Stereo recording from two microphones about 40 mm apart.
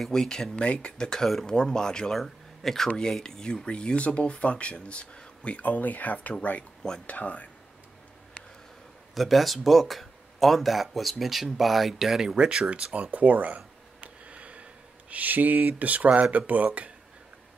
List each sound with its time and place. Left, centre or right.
0.1 s speech: centre
3.6 s speech: left
5.6 s speech: left
9.1 s speech: centre
12.4 s speech: right